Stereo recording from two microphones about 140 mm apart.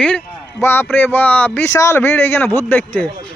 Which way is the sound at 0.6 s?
15° left (ahead or behind).